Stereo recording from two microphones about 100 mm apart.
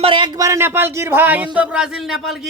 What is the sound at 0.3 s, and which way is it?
Speech, 30° right (ahead or behind).